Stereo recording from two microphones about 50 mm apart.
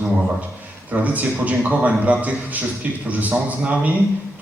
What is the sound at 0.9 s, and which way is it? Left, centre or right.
A man's voice, right.